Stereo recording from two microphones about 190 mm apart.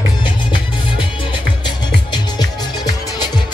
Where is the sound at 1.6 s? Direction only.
20° left (ahead or behind).